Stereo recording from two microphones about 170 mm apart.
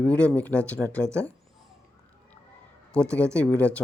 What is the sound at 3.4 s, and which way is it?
Speech, 10° left (ahead or behind).